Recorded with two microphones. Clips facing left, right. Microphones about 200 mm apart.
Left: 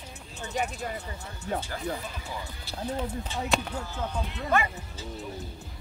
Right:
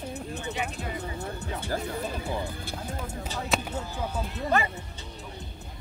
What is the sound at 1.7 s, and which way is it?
Speech, 55° right (ahead or behind).